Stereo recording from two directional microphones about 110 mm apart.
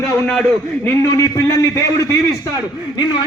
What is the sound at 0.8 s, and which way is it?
A man's voice, 25° left (ahead or behind).